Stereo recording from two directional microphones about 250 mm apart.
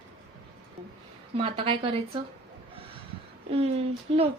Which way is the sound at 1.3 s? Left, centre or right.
Right.